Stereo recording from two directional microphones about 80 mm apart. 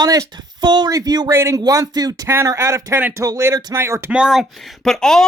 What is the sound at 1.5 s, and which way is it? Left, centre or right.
Speech, right.